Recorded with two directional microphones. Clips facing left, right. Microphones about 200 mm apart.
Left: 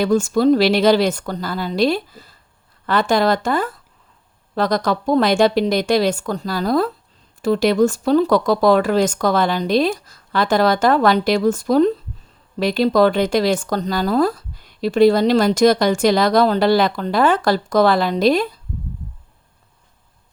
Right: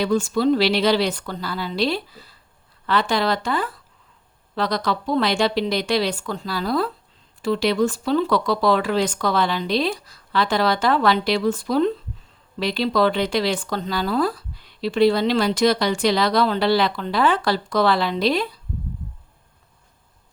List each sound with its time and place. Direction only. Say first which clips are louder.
0.0 s speech: left 4 dB; 45° left (ahead or behind)